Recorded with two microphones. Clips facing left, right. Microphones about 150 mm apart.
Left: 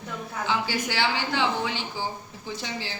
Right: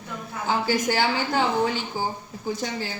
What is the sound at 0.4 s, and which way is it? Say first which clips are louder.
A woman's voice: right 5 dB; 45° right (ahead or behind).